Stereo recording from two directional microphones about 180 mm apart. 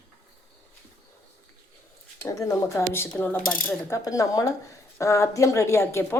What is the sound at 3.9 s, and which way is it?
A woman's voice, 20° left (ahead or behind).